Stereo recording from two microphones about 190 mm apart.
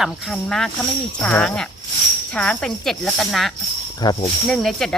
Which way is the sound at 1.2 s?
10° left (ahead or behind).